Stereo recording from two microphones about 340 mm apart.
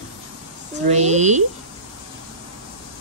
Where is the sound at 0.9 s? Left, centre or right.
Centre.